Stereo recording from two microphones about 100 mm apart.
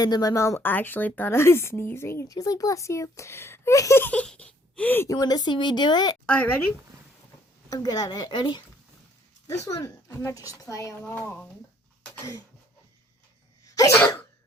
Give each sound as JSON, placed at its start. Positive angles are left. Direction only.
{"t": 0.0, "sound": "a woman's voice", "side_deg": 40}
{"t": 2.3, "sound": "speech", "side_deg": 35}
{"t": 4.0, "sound": "a sound", "side_deg": 15}
{"t": 5.0, "sound": "a woman's voice", "side_deg": 40}
{"t": 6.2, "sound": "speech", "side_deg": 15}
{"t": 7.7, "sound": "a woman's voice", "side_deg": 40}
{"t": 9.6, "sound": "speech", "side_deg": 35}
{"t": 11.0, "sound": "speech", "side_deg": 15}
{"t": 13.7, "sound": "cough", "side_deg": 35}